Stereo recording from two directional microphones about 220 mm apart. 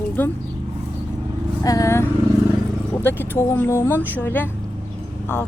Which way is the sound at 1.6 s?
15° left (ahead or behind).